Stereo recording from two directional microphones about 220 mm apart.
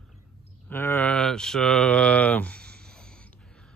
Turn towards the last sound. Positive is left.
turn(degrees=5)  # may be behind; listen again after turning